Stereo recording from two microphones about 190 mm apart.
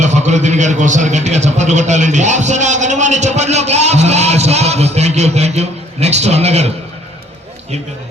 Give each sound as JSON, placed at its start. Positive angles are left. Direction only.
{"t": 0.0, "sound": "a man's voice", "side_deg": -40}